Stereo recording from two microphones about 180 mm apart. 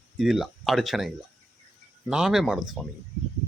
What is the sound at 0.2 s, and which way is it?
Speech, centre (ahead or behind).